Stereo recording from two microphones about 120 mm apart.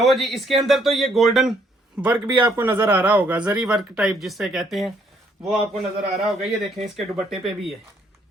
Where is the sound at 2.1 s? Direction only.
45° right (ahead or behind).